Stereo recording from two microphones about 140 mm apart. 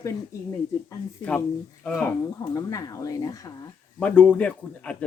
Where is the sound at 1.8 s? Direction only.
10° left (ahead or behind).